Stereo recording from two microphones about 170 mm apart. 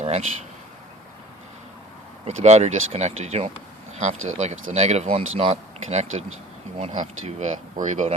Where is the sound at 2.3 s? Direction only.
40° right (ahead or behind).